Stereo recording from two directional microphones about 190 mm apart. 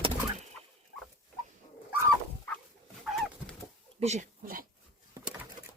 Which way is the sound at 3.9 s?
35° right (ahead or behind).